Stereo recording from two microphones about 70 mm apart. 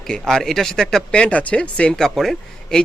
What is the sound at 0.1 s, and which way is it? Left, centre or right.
Speech, centre.